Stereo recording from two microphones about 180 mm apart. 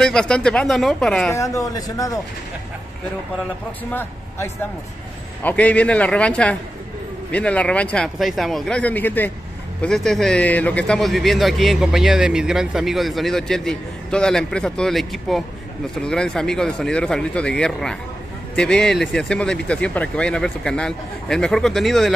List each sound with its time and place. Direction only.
0.0 s a man's voice: 5° left (ahead or behind)
1.3 s a man's voice: 15° left (ahead or behind)
3.9 s a man's voice: 10° left (ahead or behind)